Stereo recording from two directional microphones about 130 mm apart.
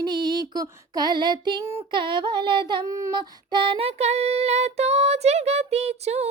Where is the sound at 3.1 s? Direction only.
35° right (ahead or behind); by 6.3 s 55° right (ahead or behind).